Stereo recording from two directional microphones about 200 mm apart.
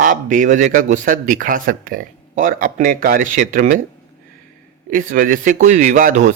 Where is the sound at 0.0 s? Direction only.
40° right (ahead or behind).